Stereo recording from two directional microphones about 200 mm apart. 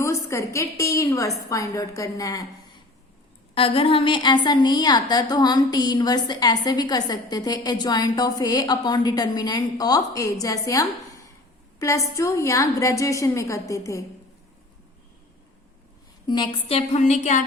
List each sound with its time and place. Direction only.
0.0 s a woman's voice: 15° left (ahead or behind)
3.5 s a woman's voice: 30° left (ahead or behind)
16.2 s speech: 20° left (ahead or behind); by 17.4 s 35° left (ahead or behind)